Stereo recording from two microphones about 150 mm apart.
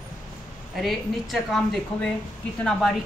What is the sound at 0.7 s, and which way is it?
A woman's voice, centre (ahead or behind).